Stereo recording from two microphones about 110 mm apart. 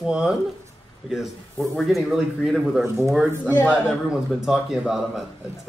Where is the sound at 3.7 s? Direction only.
5° right (ahead or behind).